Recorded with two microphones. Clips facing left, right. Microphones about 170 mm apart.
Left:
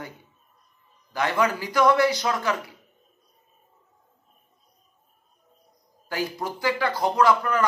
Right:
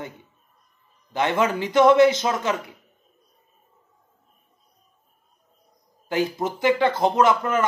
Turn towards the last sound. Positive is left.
turn(degrees=-20)  # may be behind; listen again after turning